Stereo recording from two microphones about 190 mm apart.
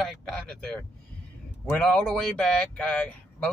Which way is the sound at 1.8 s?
5° left (ahead or behind).